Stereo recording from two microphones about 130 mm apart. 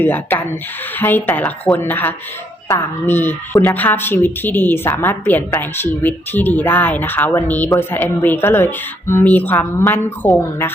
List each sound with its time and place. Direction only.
0.0 s speech: 15° left (ahead or behind)